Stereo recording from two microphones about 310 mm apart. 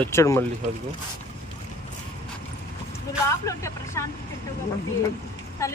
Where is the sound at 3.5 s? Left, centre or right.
Centre.